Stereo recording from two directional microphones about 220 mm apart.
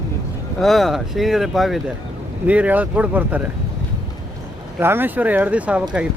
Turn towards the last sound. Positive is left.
turn(degrees=-5)  # may be behind; listen again after turning